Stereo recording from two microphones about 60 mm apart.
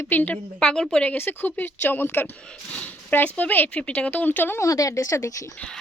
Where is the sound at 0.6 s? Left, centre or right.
Centre.